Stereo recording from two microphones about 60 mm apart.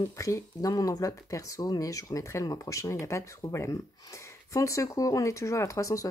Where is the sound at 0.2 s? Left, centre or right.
Left.